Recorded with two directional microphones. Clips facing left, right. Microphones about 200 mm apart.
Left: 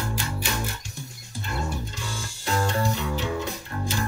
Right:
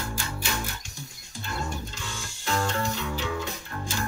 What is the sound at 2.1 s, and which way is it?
Music, 35° left (ahead or behind).